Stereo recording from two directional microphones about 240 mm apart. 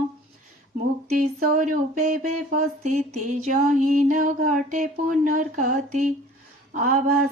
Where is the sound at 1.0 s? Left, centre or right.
Right.